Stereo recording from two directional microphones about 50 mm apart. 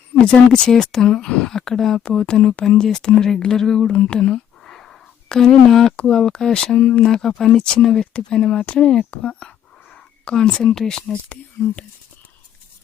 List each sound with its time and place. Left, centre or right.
0.1 s speech: centre
1.5 s speech: centre
3.9 s a sound: centre
6.0 s speech: centre